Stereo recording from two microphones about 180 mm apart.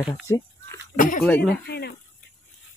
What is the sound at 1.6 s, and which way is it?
Speech, 60° left (ahead or behind).